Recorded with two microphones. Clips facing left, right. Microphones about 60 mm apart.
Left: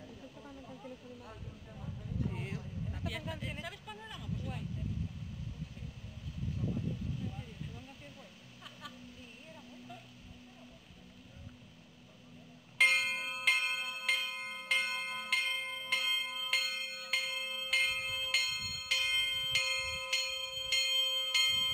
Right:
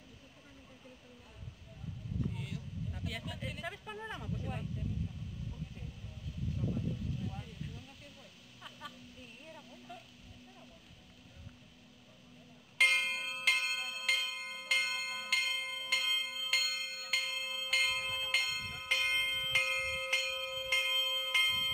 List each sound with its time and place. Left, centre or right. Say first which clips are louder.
2.3 s a sound: left 2 dB; left
3.6 s speech: right 3 dB; right
9.5 s a sound: even; centre
12.7 s bell: left 1 dB; centre
19.1 s bell: right 2 dB; right
21.4 s bell: right 1 dB; centre